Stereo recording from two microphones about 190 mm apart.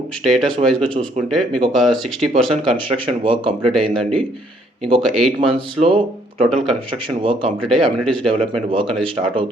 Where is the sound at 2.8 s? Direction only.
25° right (ahead or behind).